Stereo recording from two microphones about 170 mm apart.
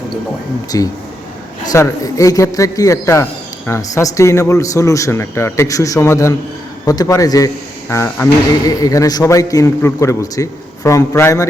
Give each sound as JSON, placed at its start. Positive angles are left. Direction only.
{"t": 0.7, "sound": "a man's voice", "side_deg": 20}